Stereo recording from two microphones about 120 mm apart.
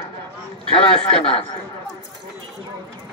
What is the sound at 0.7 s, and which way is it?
Speech, 50° left (ahead or behind).